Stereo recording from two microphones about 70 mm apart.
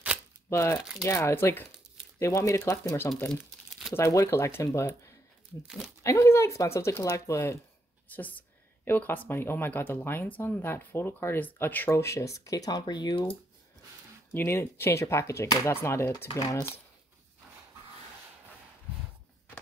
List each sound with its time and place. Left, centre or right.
0.5 s speech: left
2.1 s speech: left
8.1 s speech: left
11.9 s speech: left
14.3 s speech: left
16.3 s speech: left